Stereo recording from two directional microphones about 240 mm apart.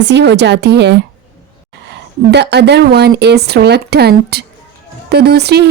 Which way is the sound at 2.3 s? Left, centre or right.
Right.